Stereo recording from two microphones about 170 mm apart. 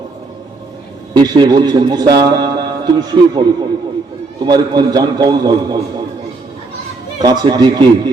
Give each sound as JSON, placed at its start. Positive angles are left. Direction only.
{"t": 1.1, "sound": "a man's voice", "side_deg": -25}
{"t": 4.4, "sound": "a man's voice", "side_deg": -25}
{"t": 7.2, "sound": "a man's voice", "side_deg": -25}